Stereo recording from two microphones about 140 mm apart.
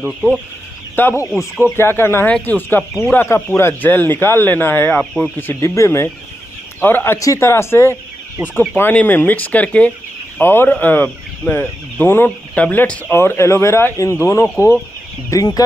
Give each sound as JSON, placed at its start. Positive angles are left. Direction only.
{"t": 0.0, "sound": "chicken", "side_deg": 0}
{"t": 0.9, "sound": "speech", "side_deg": 15}
{"t": 5.5, "sound": "speech", "side_deg": 20}